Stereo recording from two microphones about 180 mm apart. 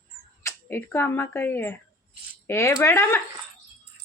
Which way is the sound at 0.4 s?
15° left (ahead or behind).